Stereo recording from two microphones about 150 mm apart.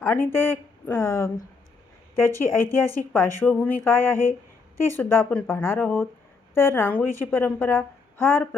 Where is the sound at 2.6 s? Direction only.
15° left (ahead or behind).